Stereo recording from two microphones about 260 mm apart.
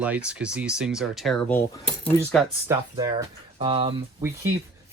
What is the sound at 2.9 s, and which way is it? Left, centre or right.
Speech, centre.